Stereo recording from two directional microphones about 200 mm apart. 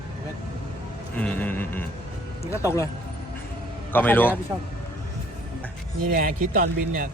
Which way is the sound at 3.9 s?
10° left (ahead or behind).